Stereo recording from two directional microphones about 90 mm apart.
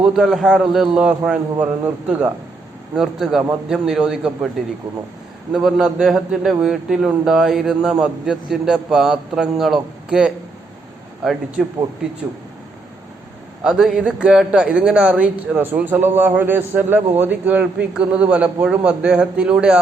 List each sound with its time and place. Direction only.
0.0 s a man's voice: 5° right (ahead or behind)
1.5 s a man's voice: 20° right (ahead or behind)
13.7 s a man's voice: 10° right (ahead or behind)